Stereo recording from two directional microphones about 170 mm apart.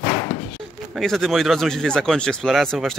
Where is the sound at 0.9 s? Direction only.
Centre (ahead or behind).